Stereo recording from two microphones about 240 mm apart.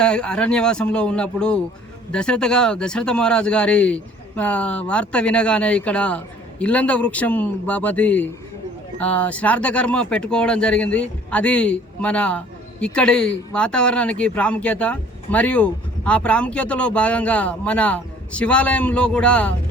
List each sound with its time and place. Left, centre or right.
0.0 s speech: centre